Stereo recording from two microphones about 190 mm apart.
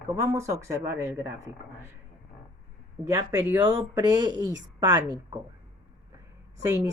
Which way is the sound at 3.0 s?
10° right (ahead or behind).